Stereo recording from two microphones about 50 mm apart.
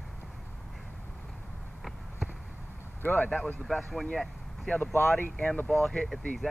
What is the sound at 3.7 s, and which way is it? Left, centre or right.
Speech, centre.